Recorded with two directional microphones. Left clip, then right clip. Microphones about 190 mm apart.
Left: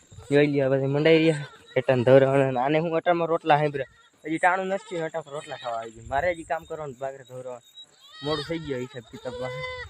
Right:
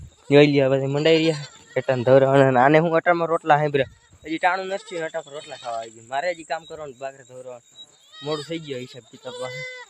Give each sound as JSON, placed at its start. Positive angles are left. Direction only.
{"t": 0.3, "sound": "speech", "side_deg": -30}
{"t": 0.6, "sound": "speech", "side_deg": -10}
{"t": 2.3, "sound": "speech", "side_deg": -15}
{"t": 5.2, "sound": "speech", "side_deg": -20}
{"t": 8.4, "sound": "speech", "side_deg": 0}
{"t": 9.5, "sound": "speech", "side_deg": 30}